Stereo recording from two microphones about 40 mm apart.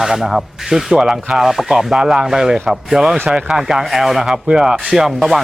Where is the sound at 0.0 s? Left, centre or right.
Centre.